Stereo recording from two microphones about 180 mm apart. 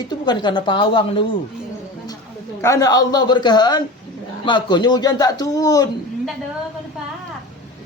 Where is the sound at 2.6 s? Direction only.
20° left (ahead or behind).